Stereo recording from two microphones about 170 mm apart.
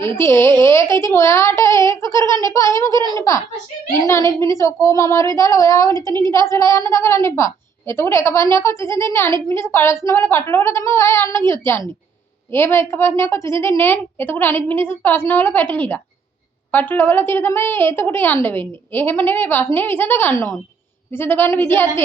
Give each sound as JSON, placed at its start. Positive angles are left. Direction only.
{"t": 0.0, "sound": "a woman's voice", "side_deg": 15}